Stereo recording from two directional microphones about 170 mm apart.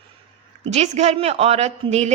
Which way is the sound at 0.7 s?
40° right (ahead or behind).